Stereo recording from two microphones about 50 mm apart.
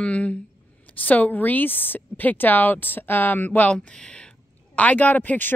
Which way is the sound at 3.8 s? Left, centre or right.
Left.